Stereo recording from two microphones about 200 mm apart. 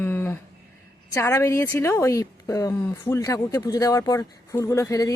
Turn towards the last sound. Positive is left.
turn(degrees=15)  # may be behind; listen again after turning